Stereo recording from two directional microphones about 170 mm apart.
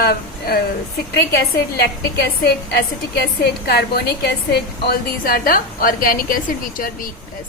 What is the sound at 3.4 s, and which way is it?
A woman's voice, 70° left (ahead or behind).